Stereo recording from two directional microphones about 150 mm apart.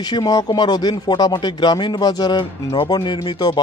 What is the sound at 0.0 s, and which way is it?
Speech, 25° left (ahead or behind).